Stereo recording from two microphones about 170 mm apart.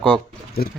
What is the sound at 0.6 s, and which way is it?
Speech, 65° left (ahead or behind).